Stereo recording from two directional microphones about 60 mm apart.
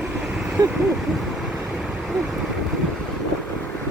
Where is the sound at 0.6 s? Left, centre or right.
Right.